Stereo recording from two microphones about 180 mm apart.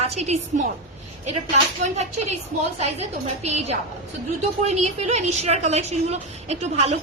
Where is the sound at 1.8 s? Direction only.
40° right (ahead or behind).